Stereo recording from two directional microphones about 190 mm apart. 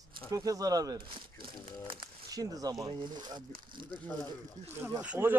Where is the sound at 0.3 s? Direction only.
20° right (ahead or behind).